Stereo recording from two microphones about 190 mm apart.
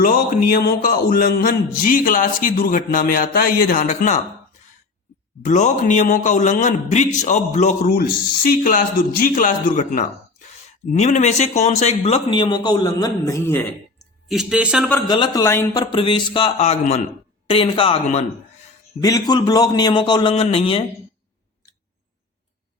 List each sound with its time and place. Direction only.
0.0 s speech: 50° left (ahead or behind)
5.5 s a man's voice: 40° left (ahead or behind); by 14.8 s 5° right (ahead or behind)
15.0 s speech: 20° left (ahead or behind)
15.9 s speech: 25° left (ahead or behind)
19.0 s speech: 20° left (ahead or behind)